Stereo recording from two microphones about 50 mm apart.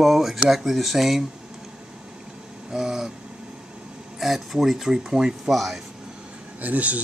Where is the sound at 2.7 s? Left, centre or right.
Centre.